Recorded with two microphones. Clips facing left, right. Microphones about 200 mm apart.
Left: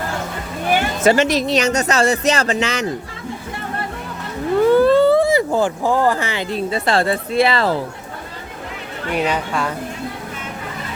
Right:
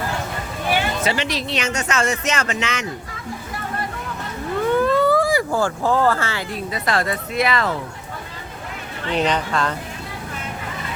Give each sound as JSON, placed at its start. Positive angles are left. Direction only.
{"t": 0.7, "sound": "speech", "side_deg": 45}
{"t": 4.7, "sound": "speech", "side_deg": 30}
{"t": 9.0, "sound": "speech", "side_deg": 10}